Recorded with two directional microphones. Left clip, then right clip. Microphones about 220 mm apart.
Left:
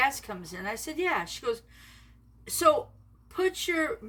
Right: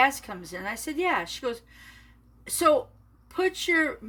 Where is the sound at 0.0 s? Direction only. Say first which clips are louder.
Right 4 dB; 20° right (ahead or behind).